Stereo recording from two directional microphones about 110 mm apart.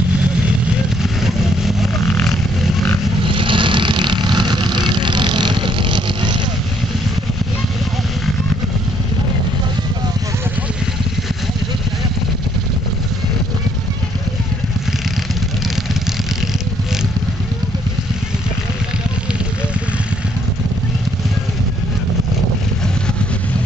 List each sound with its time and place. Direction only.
1.0 s vehicle: 5° right (ahead or behind)
3.3 s vehicle: 50° right (ahead or behind)